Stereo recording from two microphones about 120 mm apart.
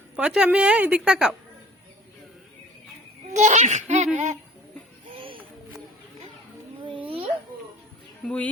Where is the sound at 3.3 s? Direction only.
80° right.